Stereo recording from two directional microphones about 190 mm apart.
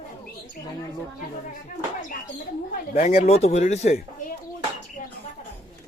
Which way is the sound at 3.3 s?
35° left (ahead or behind).